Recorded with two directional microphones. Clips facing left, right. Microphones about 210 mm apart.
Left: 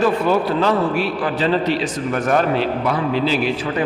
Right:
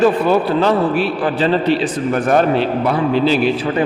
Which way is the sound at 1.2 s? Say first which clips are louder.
Right 3 dB; 30° right (ahead or behind).